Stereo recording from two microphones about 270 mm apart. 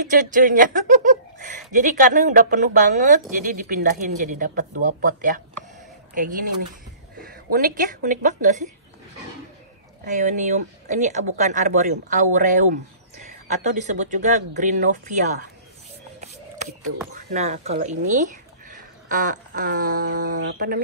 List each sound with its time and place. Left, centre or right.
0.1 s speech: right
7.5 s speech: right
10.0 s speech: right
17.1 s speech: right